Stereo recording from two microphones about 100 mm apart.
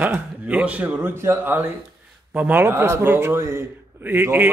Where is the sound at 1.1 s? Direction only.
25° right (ahead or behind).